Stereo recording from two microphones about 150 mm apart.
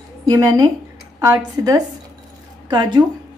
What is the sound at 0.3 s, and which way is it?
A woman's voice, 25° right (ahead or behind).